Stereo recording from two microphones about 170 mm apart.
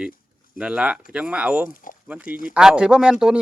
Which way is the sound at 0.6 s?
5° right (ahead or behind).